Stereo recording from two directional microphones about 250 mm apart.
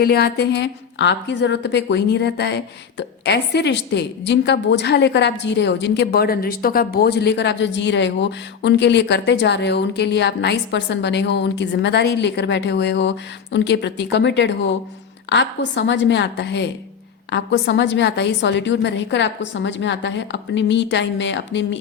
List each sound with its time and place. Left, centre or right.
0.0 s a woman's voice: left